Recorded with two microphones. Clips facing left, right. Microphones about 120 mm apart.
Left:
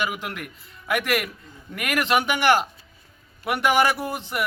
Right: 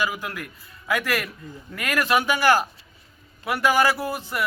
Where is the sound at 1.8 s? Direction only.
20° left (ahead or behind).